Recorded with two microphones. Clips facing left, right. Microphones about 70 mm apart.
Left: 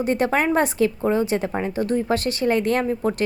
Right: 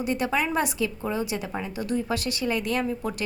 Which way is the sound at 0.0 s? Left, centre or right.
Left.